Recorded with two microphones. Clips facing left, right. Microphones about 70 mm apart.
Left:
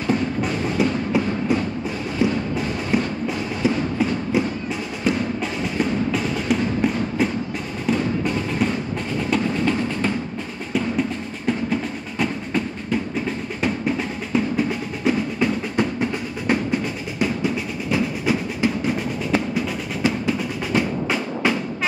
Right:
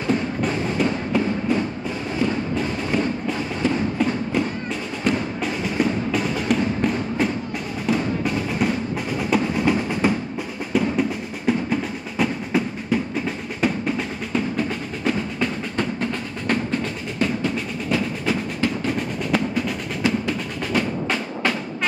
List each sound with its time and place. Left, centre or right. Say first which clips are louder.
0.4 s music: left 1 dB; centre
10.7 s music: right 2 dB; centre
17.2 s percussion: left 1 dB; centre
20.0 s music: left 1 dB; centre